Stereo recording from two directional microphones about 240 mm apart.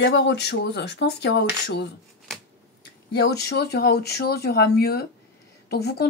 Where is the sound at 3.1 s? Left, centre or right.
Left.